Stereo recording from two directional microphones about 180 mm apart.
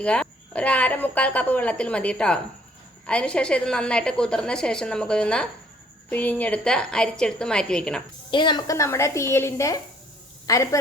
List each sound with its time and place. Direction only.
0.0 s a woman's voice: 5° left (ahead or behind)
8.3 s a woman's voice: 25° left (ahead or behind)